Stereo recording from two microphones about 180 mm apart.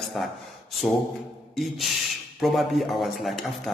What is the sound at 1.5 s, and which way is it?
A man's voice, centre (ahead or behind).